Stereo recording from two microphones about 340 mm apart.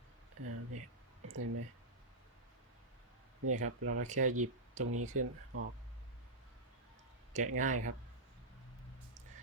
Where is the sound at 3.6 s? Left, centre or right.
Right.